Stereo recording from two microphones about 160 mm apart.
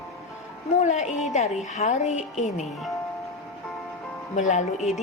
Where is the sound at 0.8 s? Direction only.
45° left (ahead or behind).